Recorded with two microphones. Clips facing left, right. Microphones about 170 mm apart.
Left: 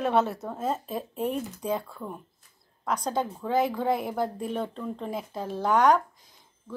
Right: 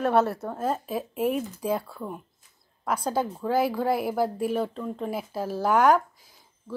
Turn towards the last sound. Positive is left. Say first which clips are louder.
# right 1 dB
turn(degrees=-5)  # may be behind; listen again after turning